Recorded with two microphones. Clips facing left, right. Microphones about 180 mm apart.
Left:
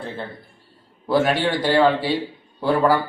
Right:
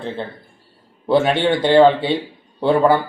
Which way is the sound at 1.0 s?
25° right (ahead or behind).